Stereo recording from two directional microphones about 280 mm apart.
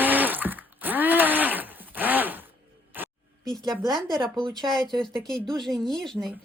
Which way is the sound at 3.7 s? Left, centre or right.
Centre.